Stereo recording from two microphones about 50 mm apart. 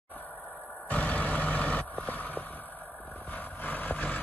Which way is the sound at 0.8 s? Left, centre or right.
Left.